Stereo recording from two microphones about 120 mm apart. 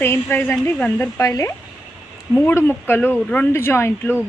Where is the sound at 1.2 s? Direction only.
30° left (ahead or behind).